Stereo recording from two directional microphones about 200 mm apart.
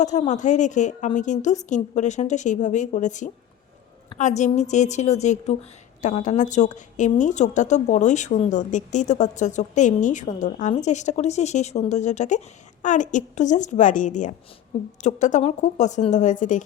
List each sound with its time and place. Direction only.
0.0 s a woman's voice: 35° left (ahead or behind)